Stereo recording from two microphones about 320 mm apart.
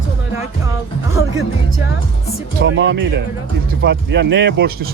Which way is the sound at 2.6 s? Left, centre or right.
Right.